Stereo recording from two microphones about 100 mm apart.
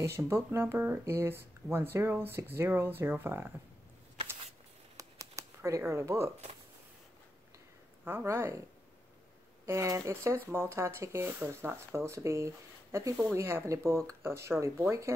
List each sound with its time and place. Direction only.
0.0 s speech: 30° right (ahead or behind)
4.9 s shuffling cards: 30° right (ahead or behind)
8.0 s speech: 20° right (ahead or behind)
9.7 s speech: 30° right (ahead or behind)